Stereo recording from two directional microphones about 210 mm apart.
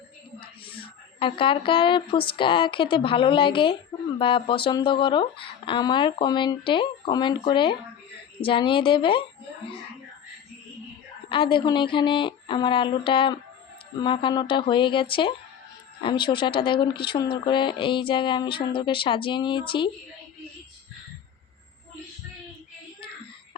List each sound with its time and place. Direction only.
0.6 s a woman's voice: 25° left (ahead or behind)
11.3 s speech: 25° left (ahead or behind)